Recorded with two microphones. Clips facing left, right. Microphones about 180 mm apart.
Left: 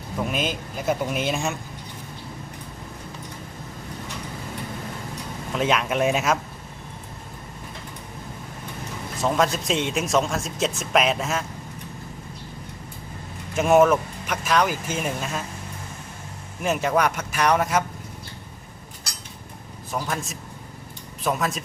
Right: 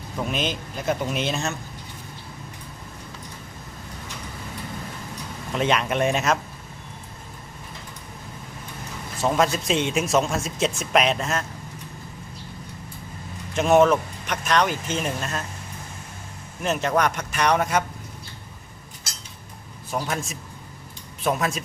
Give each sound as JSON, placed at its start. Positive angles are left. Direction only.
{"t": 0.2, "sound": "speech", "side_deg": 5}
{"t": 5.5, "sound": "speech", "side_deg": 0}
{"t": 9.1, "sound": "speech", "side_deg": 0}
{"t": 13.5, "sound": "speech", "side_deg": 5}
{"t": 16.6, "sound": "speech", "side_deg": 10}
{"t": 19.9, "sound": "speech", "side_deg": 0}